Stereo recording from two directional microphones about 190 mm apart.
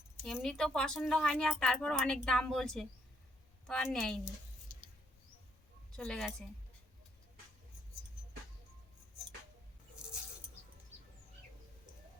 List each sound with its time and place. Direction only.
0.3 s a woman's voice: centre (ahead or behind)
4.7 s mouse: 45° left (ahead or behind)
6.0 s a woman's voice: centre (ahead or behind)